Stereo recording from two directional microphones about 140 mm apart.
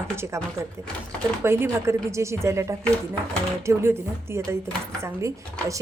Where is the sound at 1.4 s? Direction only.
20° right (ahead or behind).